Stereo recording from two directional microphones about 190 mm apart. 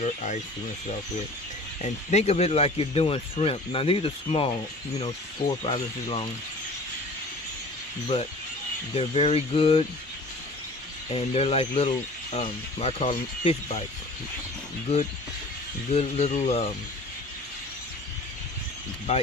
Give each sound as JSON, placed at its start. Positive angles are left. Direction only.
{"t": 0.0, "sound": "speech", "side_deg": 40}
{"t": 1.8, "sound": "speech", "side_deg": 35}
{"t": 5.6, "sound": "speech", "side_deg": 30}
{"t": 8.9, "sound": "speech", "side_deg": 30}
{"t": 11.1, "sound": "speech", "side_deg": 30}
{"t": 15.9, "sound": "speech", "side_deg": 35}
{"t": 19.1, "sound": "speech", "side_deg": 35}